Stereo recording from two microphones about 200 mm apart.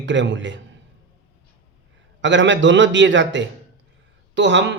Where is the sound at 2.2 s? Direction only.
65° right (ahead or behind).